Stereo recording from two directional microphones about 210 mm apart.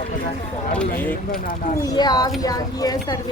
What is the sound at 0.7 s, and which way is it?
Speech, 5° left (ahead or behind).